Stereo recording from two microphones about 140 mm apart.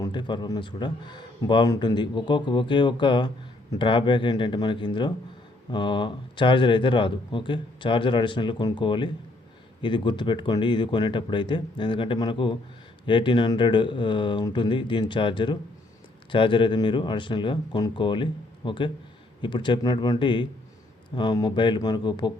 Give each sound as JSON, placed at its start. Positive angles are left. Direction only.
{"t": 0.0, "sound": "a man's voice", "side_deg": 35}